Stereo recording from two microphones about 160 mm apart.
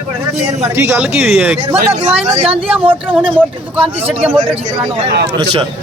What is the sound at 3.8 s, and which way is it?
Speech, 40° right (ahead or behind).